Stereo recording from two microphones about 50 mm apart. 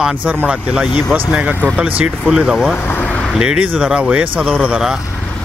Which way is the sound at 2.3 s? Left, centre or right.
Centre.